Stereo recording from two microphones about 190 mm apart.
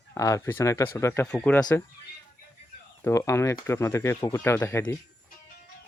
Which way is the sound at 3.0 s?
15° left (ahead or behind).